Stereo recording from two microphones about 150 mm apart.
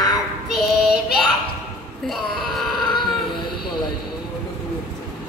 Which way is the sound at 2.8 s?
30° left (ahead or behind).